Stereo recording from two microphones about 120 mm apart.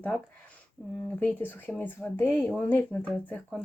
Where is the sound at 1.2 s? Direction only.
15° left (ahead or behind).